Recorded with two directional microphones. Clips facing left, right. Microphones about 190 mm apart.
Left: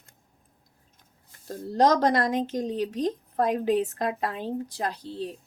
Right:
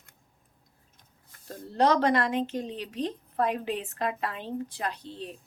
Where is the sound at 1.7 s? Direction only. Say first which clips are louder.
Left 2 dB; 40° left (ahead or behind).